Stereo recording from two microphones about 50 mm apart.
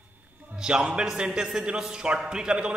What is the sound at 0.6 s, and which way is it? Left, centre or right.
A man's voice, centre.